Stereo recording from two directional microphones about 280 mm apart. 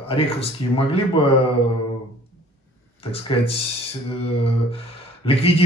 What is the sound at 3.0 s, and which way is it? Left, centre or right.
Speech, centre.